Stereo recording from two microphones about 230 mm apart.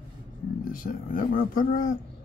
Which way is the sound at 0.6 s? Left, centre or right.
Left.